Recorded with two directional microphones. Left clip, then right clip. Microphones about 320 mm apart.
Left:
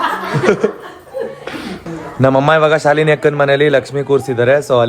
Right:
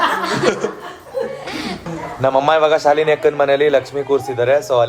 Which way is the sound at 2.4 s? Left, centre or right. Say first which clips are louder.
Left 1 dB; left.